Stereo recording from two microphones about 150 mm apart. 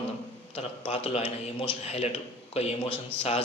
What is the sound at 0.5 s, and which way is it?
A man's voice, 40° left (ahead or behind).